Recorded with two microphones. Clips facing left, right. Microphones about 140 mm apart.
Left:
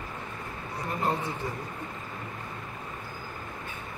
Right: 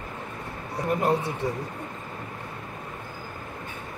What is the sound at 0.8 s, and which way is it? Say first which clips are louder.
Speech: right 6 dB; 75° right (ahead or behind).